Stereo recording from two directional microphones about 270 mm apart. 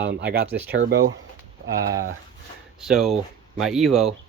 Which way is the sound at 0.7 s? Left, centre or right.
Right.